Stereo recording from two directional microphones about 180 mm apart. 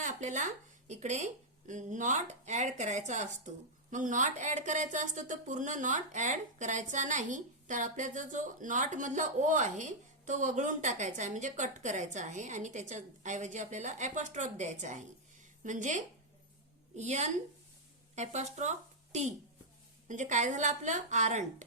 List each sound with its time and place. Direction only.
0.0 s a woman's voice: 40° right (ahead or behind)